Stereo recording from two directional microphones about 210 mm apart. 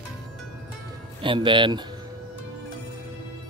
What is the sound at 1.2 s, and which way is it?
Speech, 25° right (ahead or behind).